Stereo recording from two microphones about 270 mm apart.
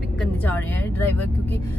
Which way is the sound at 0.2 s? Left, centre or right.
Centre.